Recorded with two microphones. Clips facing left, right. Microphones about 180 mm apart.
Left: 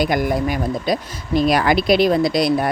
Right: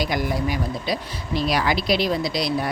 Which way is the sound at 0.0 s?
50° left (ahead or behind).